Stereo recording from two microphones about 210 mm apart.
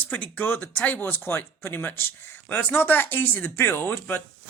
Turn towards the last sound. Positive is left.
turn(degrees=10)  # may be behind; listen again after turning